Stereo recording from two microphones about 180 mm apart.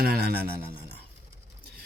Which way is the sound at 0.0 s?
60° right (ahead or behind).